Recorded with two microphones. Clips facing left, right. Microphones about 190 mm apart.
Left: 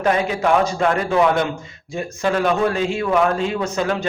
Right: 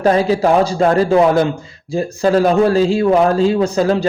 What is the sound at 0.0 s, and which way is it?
A man's voice, 35° right (ahead or behind).